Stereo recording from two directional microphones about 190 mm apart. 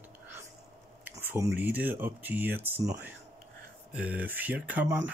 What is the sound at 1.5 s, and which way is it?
Speech, 10° right (ahead or behind).